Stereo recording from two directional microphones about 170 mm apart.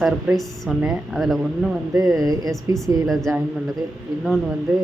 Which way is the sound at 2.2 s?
20° right (ahead or behind).